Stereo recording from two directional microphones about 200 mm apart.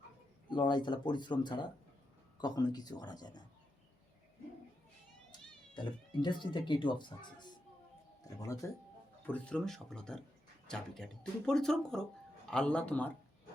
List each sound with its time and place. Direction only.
0.5 s speech: 25° left (ahead or behind)
5.3 s speech: 25° left (ahead or behind)
9.2 s speech: 5° left (ahead or behind)